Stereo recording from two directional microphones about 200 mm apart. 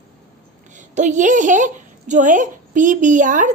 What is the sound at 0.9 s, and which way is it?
A woman's voice, 40° right (ahead or behind).